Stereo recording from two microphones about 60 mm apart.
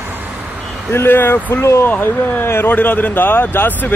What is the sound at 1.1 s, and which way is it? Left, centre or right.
Speech, left.